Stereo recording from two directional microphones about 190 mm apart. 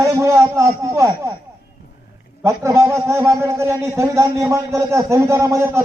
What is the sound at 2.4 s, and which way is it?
A man's voice, 15° right (ahead or behind).